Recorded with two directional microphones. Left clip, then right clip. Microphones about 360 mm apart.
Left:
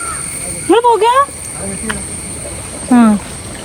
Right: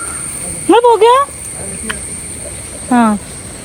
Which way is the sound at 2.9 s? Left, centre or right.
Centre.